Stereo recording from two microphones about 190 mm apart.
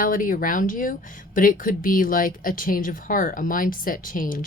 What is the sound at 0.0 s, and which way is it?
A woman's voice, 45° left (ahead or behind).